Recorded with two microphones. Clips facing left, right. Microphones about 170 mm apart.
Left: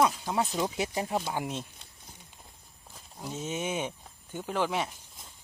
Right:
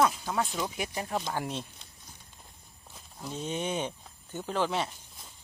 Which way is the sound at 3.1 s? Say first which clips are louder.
Even; 10° left (ahead or behind).